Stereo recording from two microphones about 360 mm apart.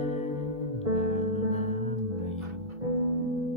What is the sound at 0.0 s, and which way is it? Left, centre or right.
Music, centre.